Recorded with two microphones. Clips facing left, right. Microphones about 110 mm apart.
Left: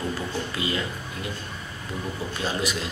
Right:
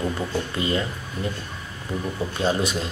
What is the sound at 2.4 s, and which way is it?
Speech, 30° right (ahead or behind).